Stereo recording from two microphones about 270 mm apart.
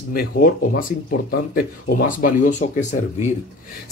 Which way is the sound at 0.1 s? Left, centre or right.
Left.